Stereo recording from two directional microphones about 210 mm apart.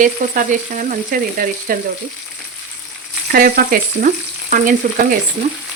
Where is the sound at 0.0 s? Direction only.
40° right (ahead or behind).